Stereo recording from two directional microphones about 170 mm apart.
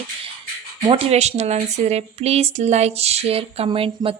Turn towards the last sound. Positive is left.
turn(degrees=-35)  # may be behind; listen again after turning